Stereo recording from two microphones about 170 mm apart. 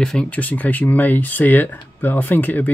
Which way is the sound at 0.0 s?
5° left (ahead or behind).